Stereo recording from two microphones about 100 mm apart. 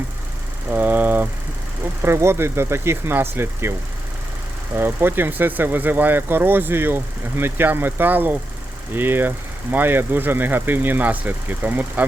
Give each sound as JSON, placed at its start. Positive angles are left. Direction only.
{"t": 0.7, "sound": "vehicle", "side_deg": -15}
{"t": 2.0, "sound": "speech", "side_deg": -25}
{"t": 4.8, "sound": "speech", "side_deg": -20}